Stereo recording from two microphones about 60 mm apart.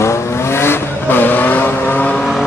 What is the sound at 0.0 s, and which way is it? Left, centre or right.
Vehicle, left.